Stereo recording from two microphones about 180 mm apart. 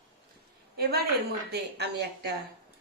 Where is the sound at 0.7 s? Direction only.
60° right (ahead or behind).